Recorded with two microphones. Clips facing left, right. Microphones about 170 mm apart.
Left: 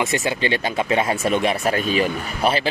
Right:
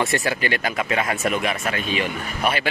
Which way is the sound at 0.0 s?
20° left (ahead or behind).